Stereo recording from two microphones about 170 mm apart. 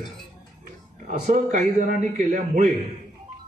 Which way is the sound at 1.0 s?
45° right (ahead or behind).